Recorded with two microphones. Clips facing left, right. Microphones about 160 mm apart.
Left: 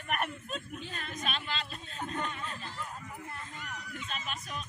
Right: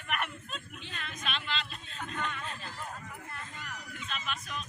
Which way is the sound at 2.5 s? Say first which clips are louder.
Even; 40° right (ahead or behind).